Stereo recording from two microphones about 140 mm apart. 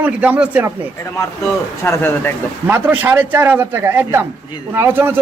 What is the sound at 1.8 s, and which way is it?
Speech, 15° left (ahead or behind).